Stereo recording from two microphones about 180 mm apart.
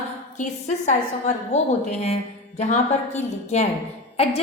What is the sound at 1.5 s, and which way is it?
A woman's voice, 40° left (ahead or behind).